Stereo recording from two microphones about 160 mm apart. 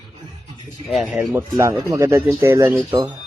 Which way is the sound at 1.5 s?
20° right (ahead or behind).